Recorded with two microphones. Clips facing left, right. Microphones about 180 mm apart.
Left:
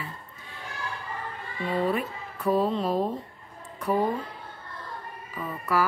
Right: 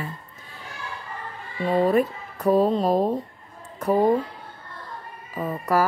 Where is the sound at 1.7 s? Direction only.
45° right (ahead or behind).